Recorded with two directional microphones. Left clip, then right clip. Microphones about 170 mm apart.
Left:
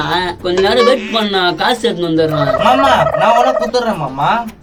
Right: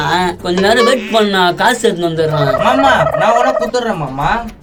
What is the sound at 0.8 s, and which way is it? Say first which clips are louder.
Fowl: left 1 dB; centre (ahead or behind).